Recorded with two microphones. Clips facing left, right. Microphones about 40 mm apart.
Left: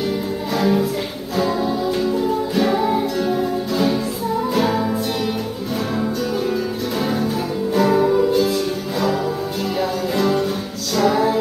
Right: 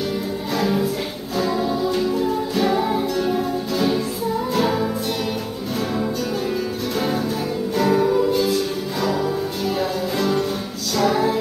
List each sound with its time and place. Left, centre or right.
0.6 s music: centre
7.0 s music: centre